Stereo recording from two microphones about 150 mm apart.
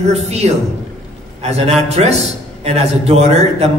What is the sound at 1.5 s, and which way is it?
A man's voice, 45° right (ahead or behind).